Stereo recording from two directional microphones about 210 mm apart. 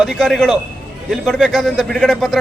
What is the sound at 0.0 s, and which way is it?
A man's voice, centre (ahead or behind).